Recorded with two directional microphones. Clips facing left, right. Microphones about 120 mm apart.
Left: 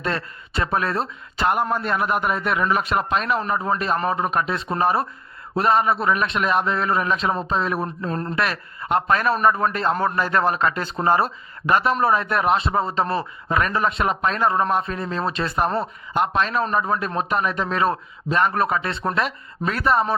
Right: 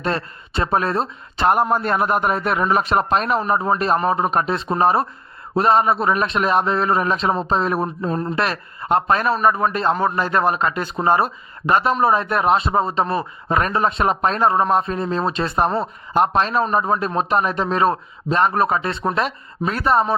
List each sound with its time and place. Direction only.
0.0 s speech: 30° right (ahead or behind)
1.7 s a man's voice: 40° right (ahead or behind); by 9.3 s 25° right (ahead or behind)
9.4 s a man's voice: 15° right (ahead or behind)
13.5 s a man's voice: 30° right (ahead or behind)